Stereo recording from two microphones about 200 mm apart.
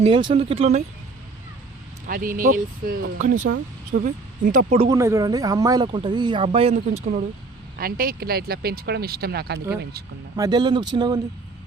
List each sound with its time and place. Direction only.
0.0 s speech: 25° right (ahead or behind)
2.0 s speech: 45° right (ahead or behind)
4.9 s speech: 15° right (ahead or behind); by 7.3 s 30° right (ahead or behind)
7.8 s speech: 45° right (ahead or behind)
10.3 s speech: 20° right (ahead or behind)